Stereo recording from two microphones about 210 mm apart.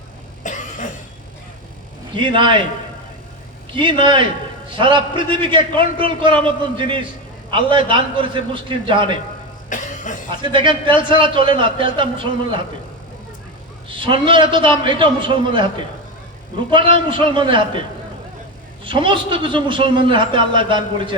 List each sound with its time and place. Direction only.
0.4 s cough: 35° left (ahead or behind)
2.1 s a man's voice: 25° right (ahead or behind)
3.7 s a man's voice: 25° right (ahead or behind)
9.6 s cough: 35° left (ahead or behind)
10.2 s a man's voice: 25° right (ahead or behind)
13.8 s a man's voice: 25° right (ahead or behind)
18.9 s a man's voice: 25° right (ahead or behind)